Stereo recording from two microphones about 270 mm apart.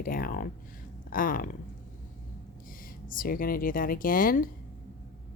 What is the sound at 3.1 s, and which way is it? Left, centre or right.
Speech, left.